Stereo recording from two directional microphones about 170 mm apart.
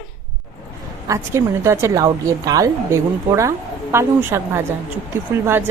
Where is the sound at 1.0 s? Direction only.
15° right (ahead or behind).